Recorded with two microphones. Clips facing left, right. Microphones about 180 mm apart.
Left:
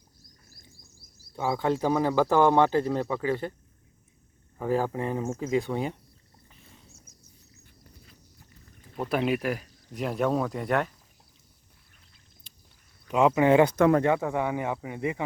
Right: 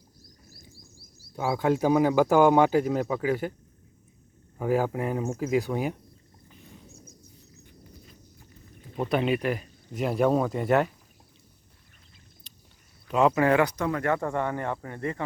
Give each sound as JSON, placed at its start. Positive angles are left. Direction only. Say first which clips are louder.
{"t": 1.4, "sound": "speech", "louder": "right 2 dB", "side_deg": -10}
{"t": 4.5, "sound": "speech", "louder": "right 1 dB", "side_deg": -10}
{"t": 9.0, "sound": "speech", "louder": "right 1 dB", "side_deg": 5}
{"t": 13.1, "sound": "speech", "louder": "left 1 dB", "side_deg": 15}
{"t": 14.2, "sound": "speech", "louder": "left 1 dB", "side_deg": 5}